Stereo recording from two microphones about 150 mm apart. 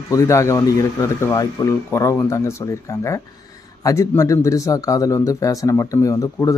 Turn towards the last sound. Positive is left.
turn(degrees=20)  # may be behind; listen again after turning